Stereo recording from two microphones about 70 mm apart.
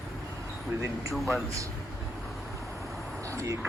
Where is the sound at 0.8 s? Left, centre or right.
Right.